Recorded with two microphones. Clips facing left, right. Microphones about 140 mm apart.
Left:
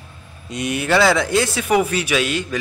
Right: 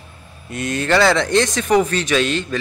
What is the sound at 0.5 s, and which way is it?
Speech, 15° left (ahead or behind).